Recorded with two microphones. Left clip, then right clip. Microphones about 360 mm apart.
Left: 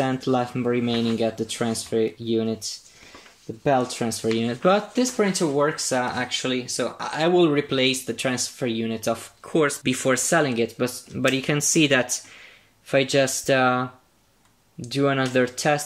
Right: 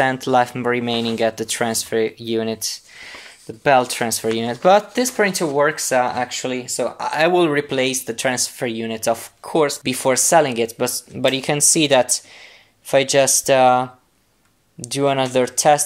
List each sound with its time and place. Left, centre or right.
0.0 s speech: centre
3.8 s speech: right